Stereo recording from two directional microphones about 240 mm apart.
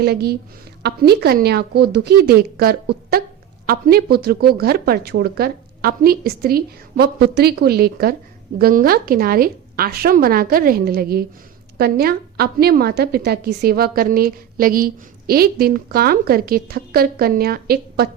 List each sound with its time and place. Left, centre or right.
0.0 s a woman's voice: right